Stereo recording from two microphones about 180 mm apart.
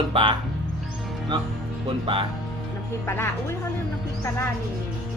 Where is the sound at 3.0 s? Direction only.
15° left (ahead or behind).